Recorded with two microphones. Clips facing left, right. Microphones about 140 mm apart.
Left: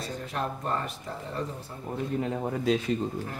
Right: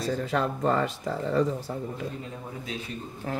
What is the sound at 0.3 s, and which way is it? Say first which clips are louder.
Speech: right 5 dB; 90° right.